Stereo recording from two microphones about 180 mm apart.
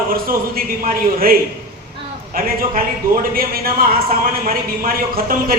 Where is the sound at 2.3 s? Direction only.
55° right (ahead or behind).